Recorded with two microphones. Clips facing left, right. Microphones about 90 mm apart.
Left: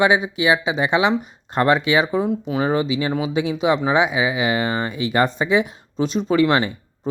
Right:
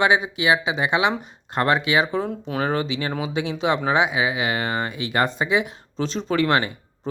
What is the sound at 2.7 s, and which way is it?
Speech, 20° left (ahead or behind).